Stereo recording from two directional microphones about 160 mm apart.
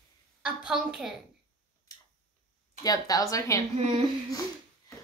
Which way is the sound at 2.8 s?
25° left (ahead or behind).